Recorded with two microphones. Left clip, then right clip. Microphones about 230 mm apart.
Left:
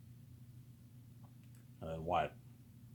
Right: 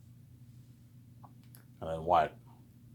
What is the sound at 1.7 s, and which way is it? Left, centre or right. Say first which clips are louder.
Speech: right 9 dB; right.